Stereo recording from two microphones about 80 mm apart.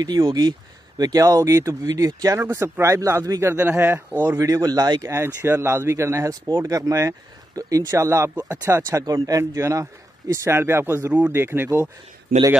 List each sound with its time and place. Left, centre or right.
0.3 s speech: right
2.4 s speech: right
3.5 s speech: right
4.5 s speech: right
5.0 s speech: right
9.0 s speech: right
11.1 s speech: right
11.4 s speech: right